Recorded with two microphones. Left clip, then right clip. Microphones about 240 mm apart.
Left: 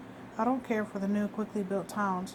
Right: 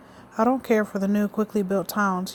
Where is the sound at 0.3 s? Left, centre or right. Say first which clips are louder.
Right 9 dB; right.